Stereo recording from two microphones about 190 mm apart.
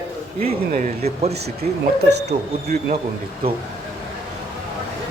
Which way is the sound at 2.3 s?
35° right (ahead or behind).